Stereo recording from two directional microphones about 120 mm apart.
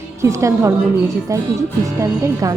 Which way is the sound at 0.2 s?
25° right (ahead or behind).